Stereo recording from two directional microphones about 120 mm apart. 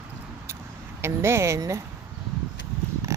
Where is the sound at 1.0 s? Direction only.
20° right (ahead or behind).